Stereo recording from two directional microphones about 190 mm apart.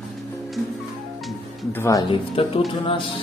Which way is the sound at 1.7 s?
15° left (ahead or behind).